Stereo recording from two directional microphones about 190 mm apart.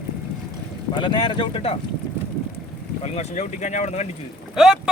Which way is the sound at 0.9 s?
25° left (ahead or behind).